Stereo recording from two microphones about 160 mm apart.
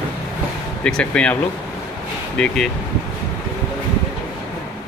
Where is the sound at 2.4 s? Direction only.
5° left (ahead or behind).